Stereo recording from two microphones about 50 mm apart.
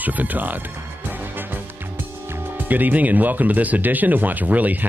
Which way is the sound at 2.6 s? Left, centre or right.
Right.